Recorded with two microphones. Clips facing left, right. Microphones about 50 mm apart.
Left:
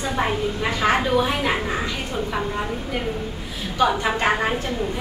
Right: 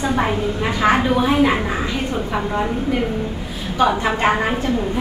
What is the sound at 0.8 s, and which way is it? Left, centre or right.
A woman's voice, centre.